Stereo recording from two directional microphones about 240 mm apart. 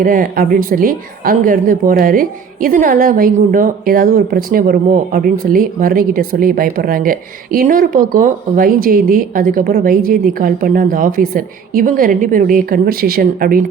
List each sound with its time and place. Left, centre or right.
0.0 s a woman's voice: right